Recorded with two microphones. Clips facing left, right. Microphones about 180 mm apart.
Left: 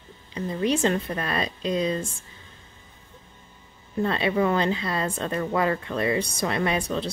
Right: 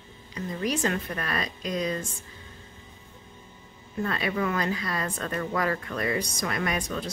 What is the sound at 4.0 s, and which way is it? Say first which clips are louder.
A woman's voice: left 5 dB; 25° left (ahead or behind).